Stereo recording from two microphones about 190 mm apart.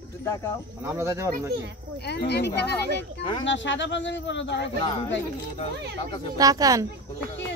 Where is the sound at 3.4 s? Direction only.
75° left (ahead or behind).